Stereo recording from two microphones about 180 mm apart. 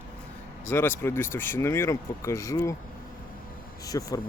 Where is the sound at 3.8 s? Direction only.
20° left (ahead or behind).